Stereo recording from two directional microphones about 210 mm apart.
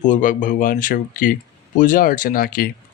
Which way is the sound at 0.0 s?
35° left (ahead or behind).